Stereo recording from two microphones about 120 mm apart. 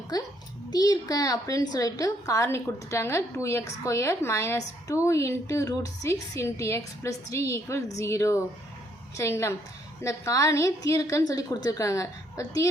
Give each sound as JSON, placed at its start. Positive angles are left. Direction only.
{"t": 0.1, "sound": "a child's voice", "side_deg": 30}